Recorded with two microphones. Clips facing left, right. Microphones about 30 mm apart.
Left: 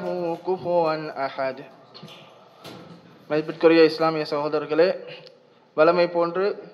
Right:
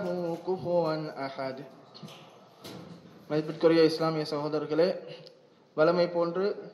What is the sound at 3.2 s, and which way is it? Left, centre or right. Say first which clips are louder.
Mantra: left 6 dB; left.